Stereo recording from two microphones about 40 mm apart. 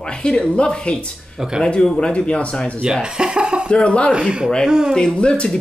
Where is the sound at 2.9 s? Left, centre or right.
Centre.